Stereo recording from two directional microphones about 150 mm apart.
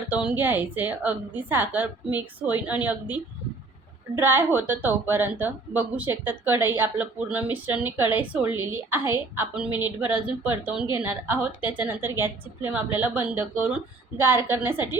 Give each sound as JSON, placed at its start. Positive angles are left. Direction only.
{"t": 0.1, "sound": "a woman's voice", "side_deg": -10}